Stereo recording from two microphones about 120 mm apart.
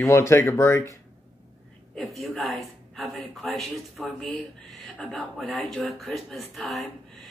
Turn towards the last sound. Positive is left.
turn(degrees=0)  # may be behind; listen again after turning